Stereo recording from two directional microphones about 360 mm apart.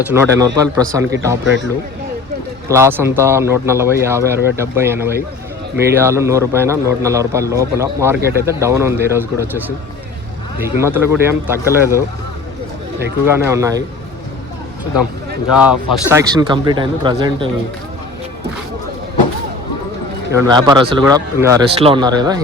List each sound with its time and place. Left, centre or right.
0.1 s a man's voice: centre
2.6 s a man's voice: centre
10.8 s a man's voice: centre
13.2 s a man's voice: centre
15.5 s a man's voice: centre
20.3 s a man's voice: centre